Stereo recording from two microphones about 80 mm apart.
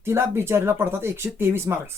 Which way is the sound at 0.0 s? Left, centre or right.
Right.